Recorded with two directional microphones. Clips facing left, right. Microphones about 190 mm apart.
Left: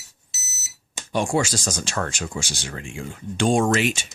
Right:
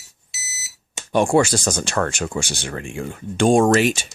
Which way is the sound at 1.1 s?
55° right (ahead or behind).